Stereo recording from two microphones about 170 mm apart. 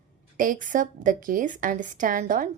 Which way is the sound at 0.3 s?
50° right (ahead or behind).